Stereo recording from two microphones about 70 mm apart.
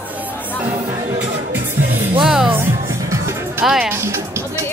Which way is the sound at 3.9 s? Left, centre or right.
Right.